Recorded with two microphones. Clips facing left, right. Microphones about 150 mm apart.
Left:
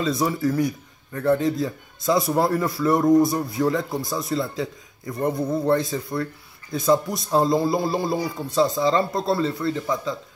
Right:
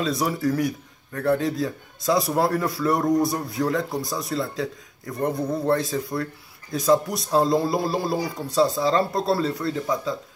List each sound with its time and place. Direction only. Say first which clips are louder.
0.0 s speech: left 1 dB; centre (ahead or behind)
7.3 s speech: left 1 dB; centre (ahead or behind)